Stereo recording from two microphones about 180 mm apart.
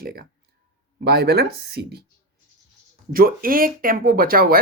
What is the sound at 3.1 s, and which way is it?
Speech, 55° right (ahead or behind).